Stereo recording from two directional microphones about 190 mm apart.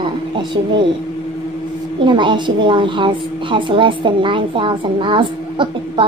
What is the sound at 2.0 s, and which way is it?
A woman's voice, 25° right (ahead or behind).